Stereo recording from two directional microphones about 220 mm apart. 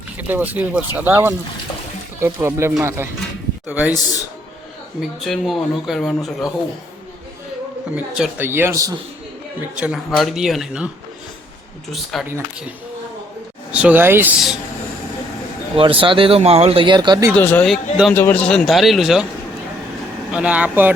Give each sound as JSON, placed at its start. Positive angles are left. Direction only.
{"t": 0.2, "sound": "speech", "side_deg": -10}
{"t": 4.9, "sound": "a man's voice", "side_deg": 0}
{"t": 7.9, "sound": "speech", "side_deg": -5}
{"t": 9.7, "sound": "a man's voice", "side_deg": -5}
{"t": 12.1, "sound": "a man's voice", "side_deg": 0}
{"t": 13.7, "sound": "speech", "side_deg": -5}
{"t": 15.7, "sound": "speech", "side_deg": -25}
{"t": 17.3, "sound": "a man's voice", "side_deg": 5}
{"t": 20.3, "sound": "a man's voice", "side_deg": -5}